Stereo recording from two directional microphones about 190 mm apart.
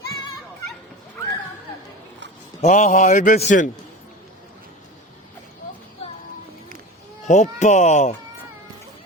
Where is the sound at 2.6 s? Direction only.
40° left (ahead or behind).